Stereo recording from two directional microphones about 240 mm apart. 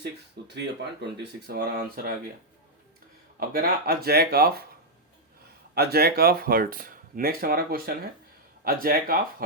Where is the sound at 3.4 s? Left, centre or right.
Right.